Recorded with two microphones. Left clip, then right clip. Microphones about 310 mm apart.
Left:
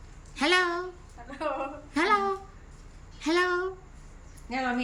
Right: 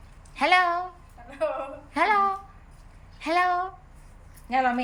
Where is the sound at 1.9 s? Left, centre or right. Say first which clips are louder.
Right 3 dB; centre.